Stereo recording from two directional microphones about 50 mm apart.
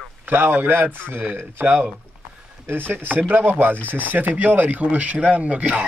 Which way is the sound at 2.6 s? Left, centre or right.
Right.